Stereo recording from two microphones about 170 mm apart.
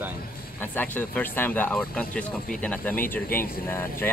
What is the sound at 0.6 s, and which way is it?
Speech, 10° left (ahead or behind).